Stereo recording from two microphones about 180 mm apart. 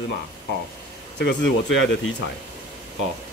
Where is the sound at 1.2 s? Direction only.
75° left (ahead or behind).